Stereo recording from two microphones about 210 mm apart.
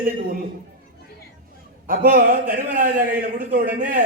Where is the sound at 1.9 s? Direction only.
40° right (ahead or behind).